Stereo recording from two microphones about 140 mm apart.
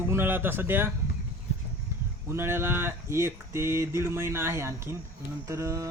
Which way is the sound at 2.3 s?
20° right (ahead or behind).